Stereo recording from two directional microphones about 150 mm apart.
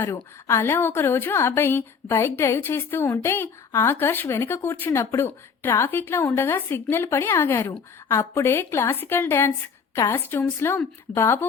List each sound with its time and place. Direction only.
0.0 s a woman's voice: 20° left (ahead or behind)